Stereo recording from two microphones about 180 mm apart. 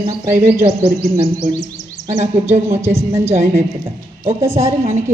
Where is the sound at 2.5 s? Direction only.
15° right (ahead or behind).